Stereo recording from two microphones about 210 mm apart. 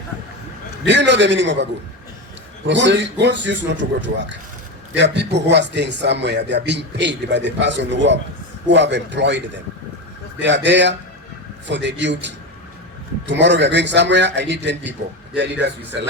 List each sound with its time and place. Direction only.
0.9 s speech: 55° right (ahead or behind)
2.6 s speech: 55° right (ahead or behind)
10.4 s speech: 60° right (ahead or behind)